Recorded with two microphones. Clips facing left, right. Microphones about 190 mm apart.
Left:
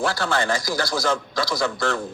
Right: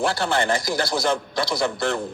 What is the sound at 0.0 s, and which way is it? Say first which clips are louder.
Speech: right 1 dB; 55° right (ahead or behind).